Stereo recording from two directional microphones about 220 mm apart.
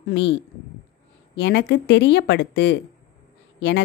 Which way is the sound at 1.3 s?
50° left (ahead or behind).